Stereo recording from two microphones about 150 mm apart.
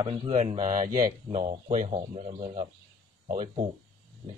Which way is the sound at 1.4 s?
40° right (ahead or behind).